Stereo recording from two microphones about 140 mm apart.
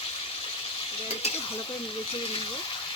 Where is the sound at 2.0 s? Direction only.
40° left (ahead or behind).